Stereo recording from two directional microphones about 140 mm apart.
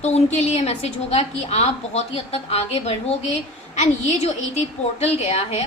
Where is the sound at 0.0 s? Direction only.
50° left (ahead or behind).